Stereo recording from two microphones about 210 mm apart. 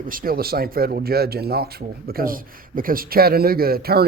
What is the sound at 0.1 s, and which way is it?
Speech, 45° right (ahead or behind).